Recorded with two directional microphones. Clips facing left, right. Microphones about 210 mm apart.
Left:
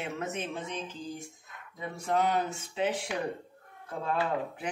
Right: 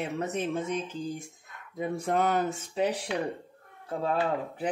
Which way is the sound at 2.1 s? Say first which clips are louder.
Right 1 dB; 50° right (ahead or behind).